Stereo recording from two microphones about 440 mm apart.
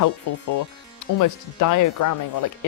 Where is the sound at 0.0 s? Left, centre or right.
Left.